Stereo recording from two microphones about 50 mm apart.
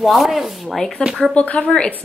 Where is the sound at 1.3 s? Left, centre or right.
Left.